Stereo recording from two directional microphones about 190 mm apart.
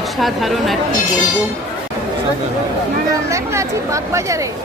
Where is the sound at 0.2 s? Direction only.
Centre (ahead or behind).